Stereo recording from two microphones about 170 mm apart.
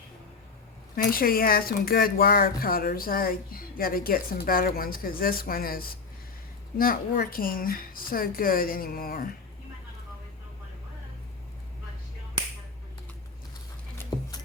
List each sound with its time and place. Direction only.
0.9 s speech: 60° left (ahead or behind)